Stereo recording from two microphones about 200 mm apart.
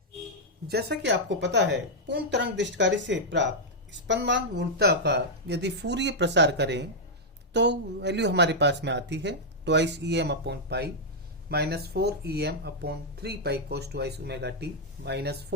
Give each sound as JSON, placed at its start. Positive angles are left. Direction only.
{"t": 0.7, "sound": "speech", "side_deg": -55}